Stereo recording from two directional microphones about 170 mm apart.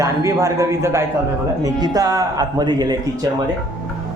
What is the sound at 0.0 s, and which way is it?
A man's voice, 20° right (ahead or behind).